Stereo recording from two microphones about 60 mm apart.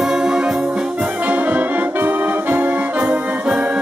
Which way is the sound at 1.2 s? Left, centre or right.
Right.